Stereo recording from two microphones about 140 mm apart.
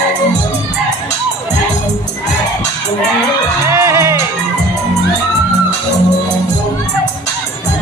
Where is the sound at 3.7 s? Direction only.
20° right (ahead or behind).